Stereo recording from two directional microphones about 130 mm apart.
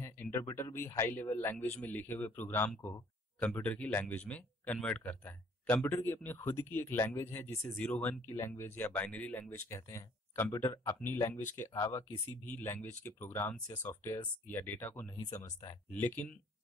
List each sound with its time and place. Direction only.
0.0 s speech: 20° left (ahead or behind)
15.0 s speech: 30° left (ahead or behind)
15.9 s speech: 15° left (ahead or behind)